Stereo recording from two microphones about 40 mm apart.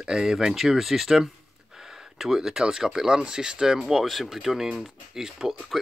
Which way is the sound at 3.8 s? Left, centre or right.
Centre.